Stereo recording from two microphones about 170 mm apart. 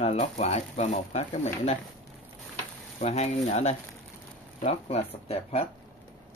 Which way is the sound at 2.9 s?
40° left (ahead or behind).